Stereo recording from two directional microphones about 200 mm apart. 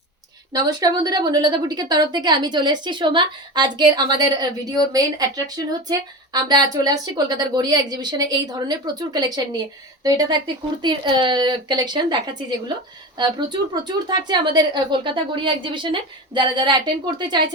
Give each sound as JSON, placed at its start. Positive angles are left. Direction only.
{"t": 0.5, "sound": "a woman's voice", "side_deg": -20}